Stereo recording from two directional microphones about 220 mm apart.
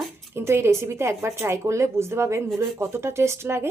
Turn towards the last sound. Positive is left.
turn(degrees=-10)  # may be behind; listen again after turning